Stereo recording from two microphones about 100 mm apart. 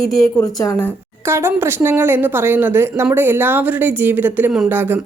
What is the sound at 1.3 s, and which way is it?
A woman's voice, 25° right (ahead or behind).